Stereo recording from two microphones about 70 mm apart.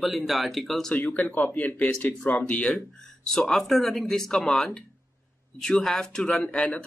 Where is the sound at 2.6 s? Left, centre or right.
Centre.